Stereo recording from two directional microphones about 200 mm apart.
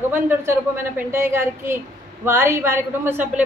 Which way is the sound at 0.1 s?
10° right (ahead or behind).